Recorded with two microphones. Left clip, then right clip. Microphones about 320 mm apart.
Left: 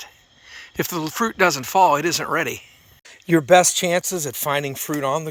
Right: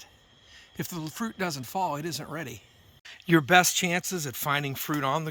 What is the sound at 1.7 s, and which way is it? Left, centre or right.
Speech, left.